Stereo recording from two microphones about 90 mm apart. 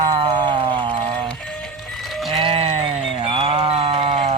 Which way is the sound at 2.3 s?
90° right.